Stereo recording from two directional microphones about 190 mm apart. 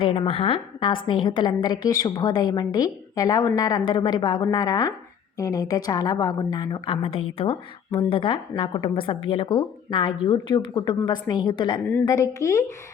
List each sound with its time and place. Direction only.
0.0 s a woman's voice: 30° left (ahead or behind)